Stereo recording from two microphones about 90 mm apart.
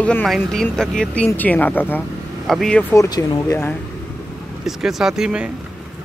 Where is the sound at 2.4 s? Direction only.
5° left (ahead or behind).